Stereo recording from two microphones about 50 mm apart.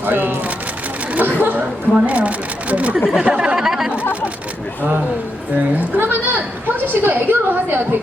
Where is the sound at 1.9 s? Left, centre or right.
Right.